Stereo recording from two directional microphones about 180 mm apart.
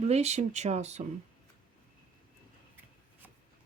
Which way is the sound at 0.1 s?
35° right (ahead or behind).